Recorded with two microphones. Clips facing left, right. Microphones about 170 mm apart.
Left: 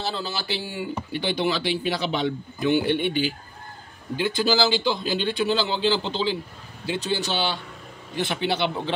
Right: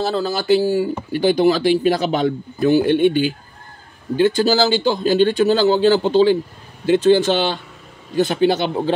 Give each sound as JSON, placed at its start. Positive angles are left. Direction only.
{"t": 0.0, "sound": "speech", "side_deg": -45}